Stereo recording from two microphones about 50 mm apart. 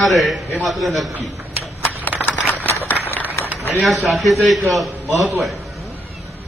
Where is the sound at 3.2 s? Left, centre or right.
Right.